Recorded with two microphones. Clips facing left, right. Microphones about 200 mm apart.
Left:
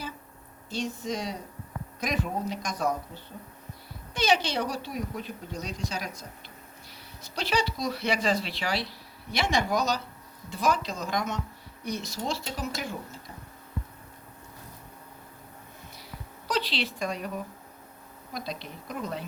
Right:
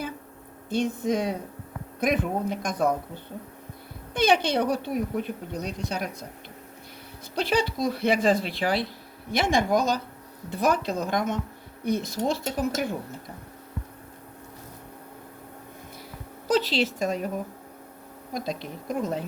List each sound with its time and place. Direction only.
0.7 s a woman's voice: 55° right (ahead or behind)
4.1 s a woman's voice: 55° right (ahead or behind)
7.3 s a woman's voice: 55° right (ahead or behind)
16.5 s speech: 45° right (ahead or behind)
18.3 s speech: 45° right (ahead or behind)